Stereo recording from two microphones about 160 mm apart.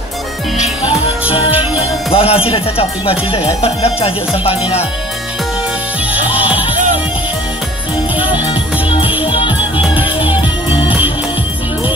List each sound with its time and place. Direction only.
2.1 s speech: 35° left (ahead or behind)
6.1 s music: 10° right (ahead or behind)
8.2 s music: 10° right (ahead or behind)
9.2 s music: 30° left (ahead or behind)
9.8 s music: 10° right (ahead or behind)